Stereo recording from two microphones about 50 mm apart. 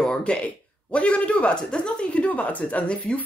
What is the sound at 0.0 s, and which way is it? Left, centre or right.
Speech, centre.